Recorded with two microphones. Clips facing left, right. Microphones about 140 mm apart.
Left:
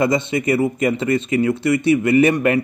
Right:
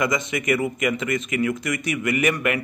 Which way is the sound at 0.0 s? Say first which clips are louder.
Left 6 dB; 30° left (ahead or behind).